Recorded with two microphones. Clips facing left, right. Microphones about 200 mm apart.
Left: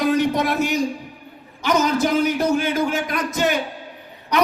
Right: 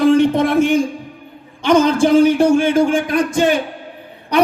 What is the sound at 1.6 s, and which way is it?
A man's voice, 30° right (ahead or behind).